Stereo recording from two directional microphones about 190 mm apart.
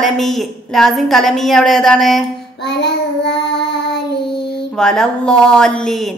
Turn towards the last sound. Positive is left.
turn(degrees=5)  # may be behind; listen again after turning